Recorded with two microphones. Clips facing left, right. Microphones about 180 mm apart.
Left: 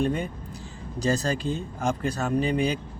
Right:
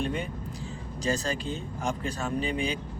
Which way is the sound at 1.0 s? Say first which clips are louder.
Left 4 dB; 40° left (ahead or behind).